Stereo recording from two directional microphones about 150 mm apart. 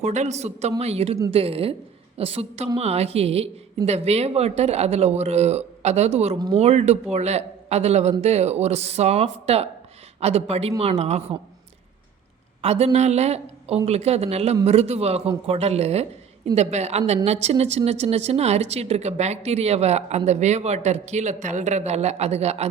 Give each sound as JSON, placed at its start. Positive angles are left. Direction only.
{"t": 0.0, "sound": "a woman's voice", "side_deg": -50}
{"t": 12.6, "sound": "speech", "side_deg": -45}